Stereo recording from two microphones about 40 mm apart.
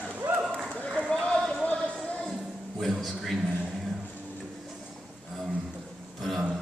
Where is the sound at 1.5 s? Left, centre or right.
Left.